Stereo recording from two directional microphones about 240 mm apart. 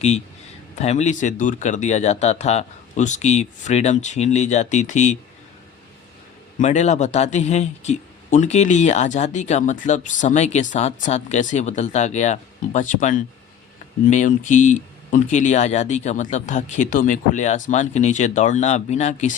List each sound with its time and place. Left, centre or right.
0.8 s a man's voice: left
6.6 s a man's voice: left